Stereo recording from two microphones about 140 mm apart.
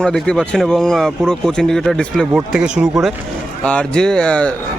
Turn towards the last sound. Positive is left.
turn(degrees=5)  # may be behind; listen again after turning